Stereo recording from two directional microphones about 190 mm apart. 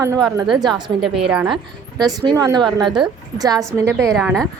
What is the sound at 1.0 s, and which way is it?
Speech, 5° right (ahead or behind).